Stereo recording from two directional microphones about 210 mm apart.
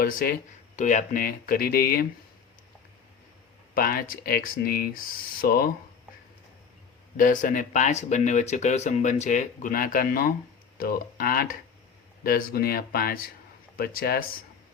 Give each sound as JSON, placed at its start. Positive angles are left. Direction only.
{"t": 0.0, "sound": "speech", "side_deg": 45}
{"t": 3.8, "sound": "speech", "side_deg": 45}
{"t": 7.2, "sound": "speech", "side_deg": 40}